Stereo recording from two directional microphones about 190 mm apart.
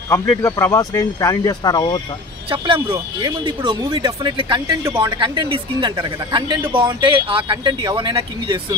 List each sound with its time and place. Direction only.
0.1 s speech: 15° left (ahead or behind)
2.5 s speech: 25° right (ahead or behind)